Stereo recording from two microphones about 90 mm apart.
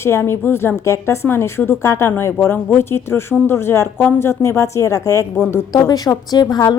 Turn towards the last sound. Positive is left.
turn(degrees=45)  # may be behind; listen again after turning